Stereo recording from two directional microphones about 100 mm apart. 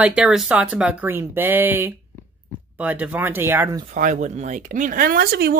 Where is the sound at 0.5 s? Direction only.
15° right (ahead or behind).